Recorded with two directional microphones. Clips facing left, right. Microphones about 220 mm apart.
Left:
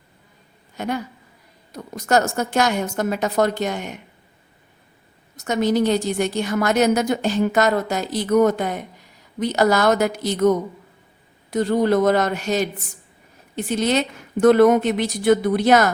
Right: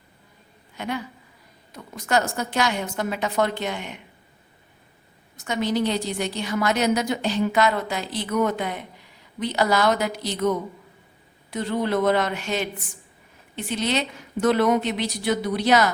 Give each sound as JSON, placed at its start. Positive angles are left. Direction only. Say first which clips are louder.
{"t": 0.8, "sound": "a woman's voice", "louder": "left 4 dB", "side_deg": 45}
{"t": 5.4, "sound": "a woman's voice", "louder": "left 5 dB", "side_deg": 45}